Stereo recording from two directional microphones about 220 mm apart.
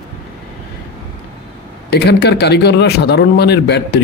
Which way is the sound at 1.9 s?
45° left (ahead or behind).